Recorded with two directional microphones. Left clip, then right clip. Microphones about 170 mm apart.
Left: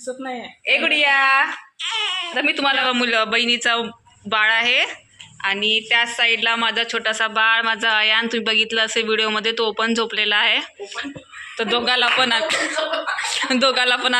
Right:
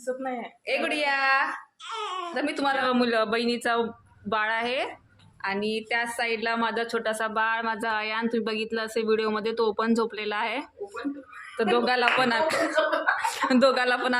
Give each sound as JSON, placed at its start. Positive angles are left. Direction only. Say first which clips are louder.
{"t": 0.8, "sound": "a woman's voice", "louder": "left 9 dB", "side_deg": 30}
{"t": 1.9, "sound": "baby cry", "louder": "left 9 dB", "side_deg": -10}
{"t": 2.3, "sound": "speech", "louder": "left 7 dB", "side_deg": 15}
{"t": 2.8, "sound": "a woman's voice", "louder": "left 5 dB", "side_deg": -5}